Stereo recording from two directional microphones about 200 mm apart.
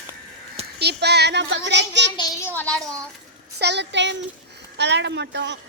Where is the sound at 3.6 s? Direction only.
60° right (ahead or behind).